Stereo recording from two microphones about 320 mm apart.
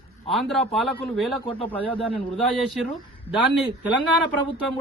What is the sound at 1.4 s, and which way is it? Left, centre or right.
Speech, centre.